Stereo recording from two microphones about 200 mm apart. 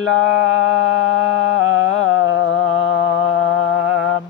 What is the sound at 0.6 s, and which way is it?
Music, 90° left.